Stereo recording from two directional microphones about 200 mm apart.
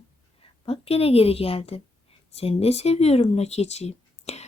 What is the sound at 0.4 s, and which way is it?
A woman's voice, 30° left (ahead or behind).